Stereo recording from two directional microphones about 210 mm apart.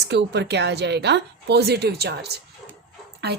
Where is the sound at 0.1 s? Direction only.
55° right (ahead or behind).